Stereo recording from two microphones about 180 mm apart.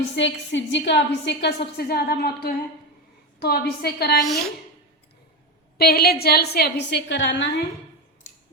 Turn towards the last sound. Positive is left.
turn(degrees=90)